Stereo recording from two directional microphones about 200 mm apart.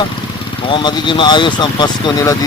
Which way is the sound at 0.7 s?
25° left (ahead or behind).